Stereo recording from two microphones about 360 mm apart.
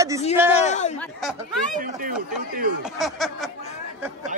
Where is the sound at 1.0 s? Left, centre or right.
Centre.